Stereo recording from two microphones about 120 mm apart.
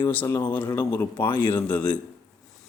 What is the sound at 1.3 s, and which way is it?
Speech, 40° left (ahead or behind).